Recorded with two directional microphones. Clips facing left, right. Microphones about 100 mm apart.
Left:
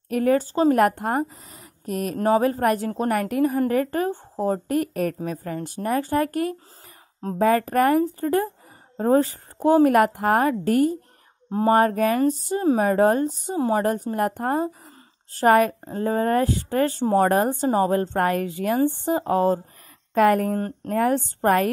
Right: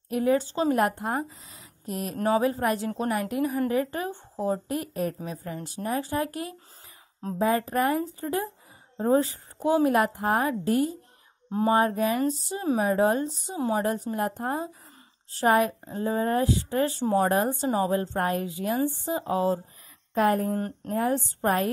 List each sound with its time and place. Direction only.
0.1 s speech: 55° left (ahead or behind)
2.1 s a woman's voice: 35° left (ahead or behind)
2.4 s a woman's voice: 50° left (ahead or behind)
13.8 s a woman's voice: 55° left (ahead or behind)
20.2 s speech: 70° left (ahead or behind)
20.5 s speech: 40° left (ahead or behind)
20.9 s a woman's voice: 65° left (ahead or behind)